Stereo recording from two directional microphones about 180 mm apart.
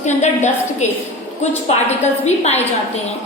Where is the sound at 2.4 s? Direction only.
35° left (ahead or behind).